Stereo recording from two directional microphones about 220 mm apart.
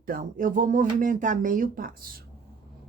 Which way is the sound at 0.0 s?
40° right (ahead or behind).